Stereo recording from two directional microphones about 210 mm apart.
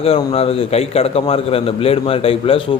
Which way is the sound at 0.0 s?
30° left (ahead or behind).